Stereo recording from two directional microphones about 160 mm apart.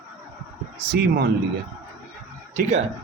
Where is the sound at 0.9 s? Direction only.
80° right.